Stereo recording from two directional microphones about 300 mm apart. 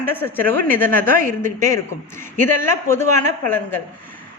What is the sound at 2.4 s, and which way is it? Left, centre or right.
A woman's voice, centre.